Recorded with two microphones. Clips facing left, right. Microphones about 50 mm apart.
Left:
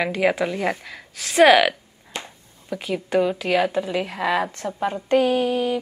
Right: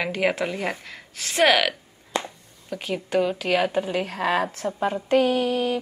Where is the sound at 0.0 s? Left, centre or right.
Centre.